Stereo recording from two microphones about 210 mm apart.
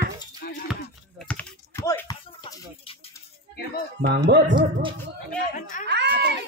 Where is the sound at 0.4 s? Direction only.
45° left (ahead or behind).